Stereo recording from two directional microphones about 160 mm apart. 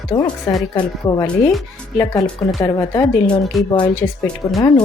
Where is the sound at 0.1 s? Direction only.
30° left (ahead or behind).